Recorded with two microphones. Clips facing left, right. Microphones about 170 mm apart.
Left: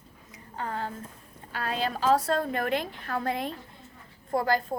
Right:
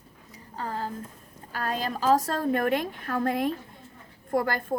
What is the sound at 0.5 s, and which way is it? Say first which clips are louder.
A woman's voice: right 1 dB; 35° right (ahead or behind).